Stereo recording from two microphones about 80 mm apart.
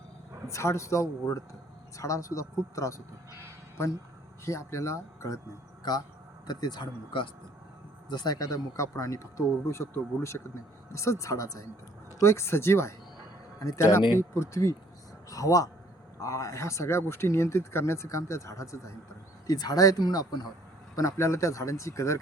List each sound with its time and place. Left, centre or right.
0.4 s speech: left
4.4 s speech: left
6.5 s speech: left
8.1 s speech: left
19.5 s speech: left
20.9 s speech: left